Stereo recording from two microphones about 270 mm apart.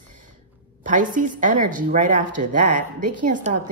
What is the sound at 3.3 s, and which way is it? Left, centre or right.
Speech, right.